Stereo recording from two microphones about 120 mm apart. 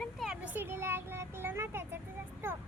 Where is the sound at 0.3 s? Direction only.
15° right (ahead or behind).